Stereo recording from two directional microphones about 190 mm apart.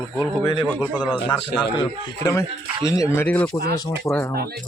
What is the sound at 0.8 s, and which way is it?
Speech, 10° right (ahead or behind).